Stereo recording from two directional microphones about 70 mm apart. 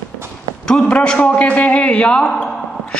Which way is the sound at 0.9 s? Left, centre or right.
Centre.